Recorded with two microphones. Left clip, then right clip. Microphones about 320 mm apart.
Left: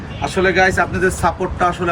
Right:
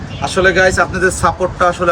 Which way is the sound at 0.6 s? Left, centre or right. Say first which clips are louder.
Right 3 dB; centre.